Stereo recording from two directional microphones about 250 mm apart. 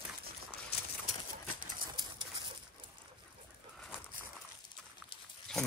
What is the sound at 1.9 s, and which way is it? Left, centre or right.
Dog, centre.